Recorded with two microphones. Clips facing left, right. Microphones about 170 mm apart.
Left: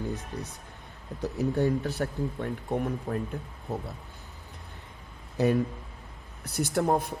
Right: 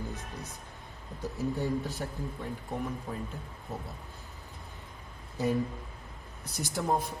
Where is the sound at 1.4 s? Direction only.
65° left (ahead or behind).